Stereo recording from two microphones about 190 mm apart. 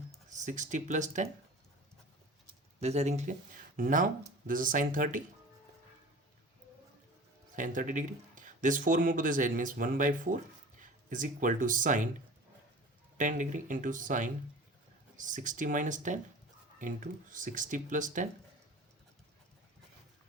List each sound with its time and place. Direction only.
0.3 s speech: 40° right (ahead or behind)
2.8 s speech: 35° right (ahead or behind)
7.5 s speech: 45° right (ahead or behind)
13.1 s speech: 40° right (ahead or behind)